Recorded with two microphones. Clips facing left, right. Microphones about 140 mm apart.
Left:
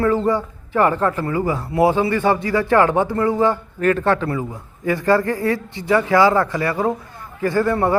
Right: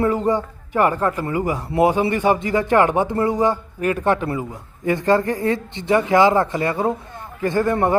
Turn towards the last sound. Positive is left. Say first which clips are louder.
# even
turn(degrees=-20)  # may be behind; listen again after turning